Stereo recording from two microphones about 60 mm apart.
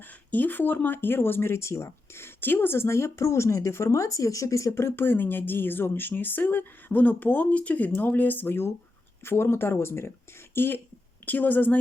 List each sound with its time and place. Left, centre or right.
0.3 s speech: left
4.7 s a woman's voice: left